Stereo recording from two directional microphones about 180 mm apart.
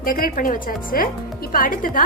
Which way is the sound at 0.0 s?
50° left (ahead or behind).